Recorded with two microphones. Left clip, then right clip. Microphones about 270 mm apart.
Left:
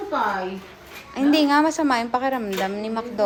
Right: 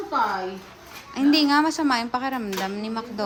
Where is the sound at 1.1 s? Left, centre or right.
Centre.